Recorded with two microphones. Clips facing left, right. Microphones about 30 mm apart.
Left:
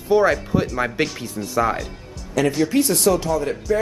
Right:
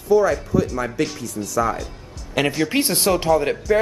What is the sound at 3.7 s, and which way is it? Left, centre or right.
Speech, centre.